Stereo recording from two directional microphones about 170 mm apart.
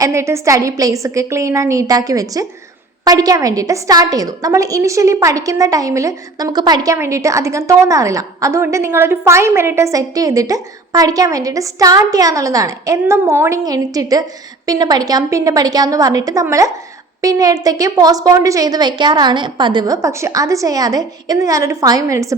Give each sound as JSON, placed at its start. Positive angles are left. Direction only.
{"t": 0.0, "sound": "a woman's voice", "side_deg": -15}